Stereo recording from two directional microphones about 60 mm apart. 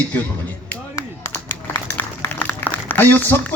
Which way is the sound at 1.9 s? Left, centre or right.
Left.